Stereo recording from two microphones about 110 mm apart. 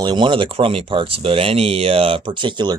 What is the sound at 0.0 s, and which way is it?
Speech, 45° right (ahead or behind).